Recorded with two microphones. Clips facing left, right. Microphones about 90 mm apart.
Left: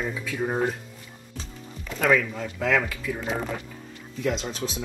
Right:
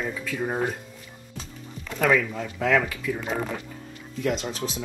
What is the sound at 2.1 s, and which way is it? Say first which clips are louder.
Speech: left 1 dB; 5° right (ahead or behind).